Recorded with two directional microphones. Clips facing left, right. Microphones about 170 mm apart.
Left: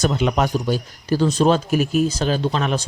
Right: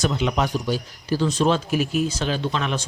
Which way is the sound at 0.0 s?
45° left (ahead or behind).